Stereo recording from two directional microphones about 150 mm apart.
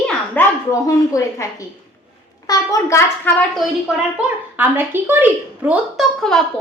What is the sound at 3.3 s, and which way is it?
Speech, 10° left (ahead or behind).